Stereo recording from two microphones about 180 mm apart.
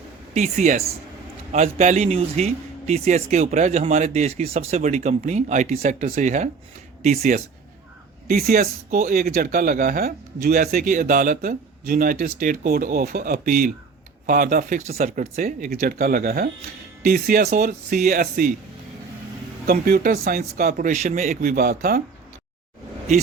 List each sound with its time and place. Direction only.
0.3 s speech: 40° right (ahead or behind)
8.3 s speech: 55° right (ahead or behind)
19.6 s speech: 55° right (ahead or behind)